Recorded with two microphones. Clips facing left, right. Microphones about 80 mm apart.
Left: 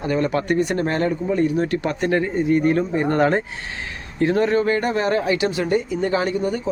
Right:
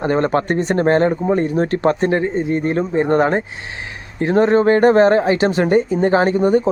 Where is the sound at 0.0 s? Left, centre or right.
Right.